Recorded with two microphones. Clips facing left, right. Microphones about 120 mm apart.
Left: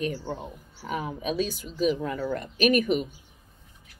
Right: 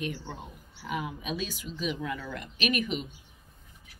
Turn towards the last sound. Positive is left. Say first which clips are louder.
# left 8 dB
turn(degrees=45)  # may be behind; listen again after turning